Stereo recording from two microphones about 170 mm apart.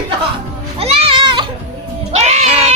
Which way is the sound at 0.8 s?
35° right (ahead or behind).